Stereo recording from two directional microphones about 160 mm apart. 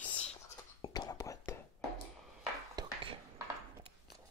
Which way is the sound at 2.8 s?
25° right (ahead or behind).